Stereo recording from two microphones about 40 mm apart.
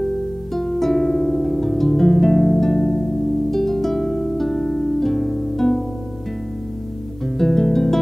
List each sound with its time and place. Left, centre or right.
0.6 s music: centre
7.3 s music: centre